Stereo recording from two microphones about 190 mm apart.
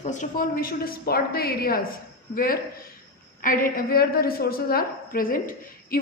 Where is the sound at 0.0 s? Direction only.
40° left (ahead or behind).